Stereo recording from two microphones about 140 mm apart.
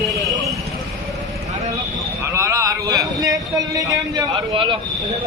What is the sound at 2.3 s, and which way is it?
Speech, 20° right (ahead or behind).